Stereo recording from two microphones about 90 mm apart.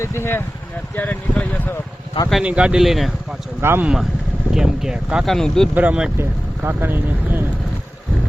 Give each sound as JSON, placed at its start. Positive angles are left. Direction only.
{"t": 0.0, "sound": "speech", "side_deg": 30}
{"t": 2.4, "sound": "speech", "side_deg": -10}
{"t": 3.6, "sound": "speech", "side_deg": -25}
{"t": 4.5, "sound": "speech", "side_deg": -5}
{"t": 5.2, "sound": "speech", "side_deg": 5}
{"t": 5.7, "sound": "speech", "side_deg": -15}
{"t": 6.1, "sound": "speech", "side_deg": -25}